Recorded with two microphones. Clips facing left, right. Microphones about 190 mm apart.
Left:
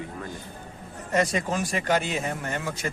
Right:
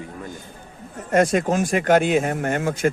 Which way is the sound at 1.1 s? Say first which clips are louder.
Right 7 dB; 50° right (ahead or behind).